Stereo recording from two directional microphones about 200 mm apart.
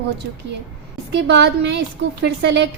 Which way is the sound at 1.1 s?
60° right (ahead or behind).